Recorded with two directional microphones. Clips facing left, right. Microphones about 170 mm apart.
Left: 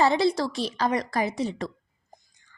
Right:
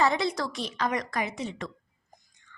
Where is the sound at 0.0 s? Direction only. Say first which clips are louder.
Left 4 dB; 30° left (ahead or behind).